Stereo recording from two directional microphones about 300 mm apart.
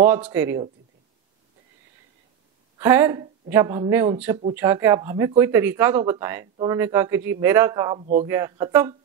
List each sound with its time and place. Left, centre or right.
0.0 s speech: centre
2.8 s speech: centre
8.3 s speech: centre